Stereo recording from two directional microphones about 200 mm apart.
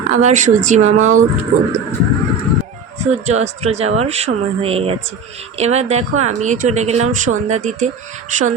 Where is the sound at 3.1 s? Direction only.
35° right (ahead or behind).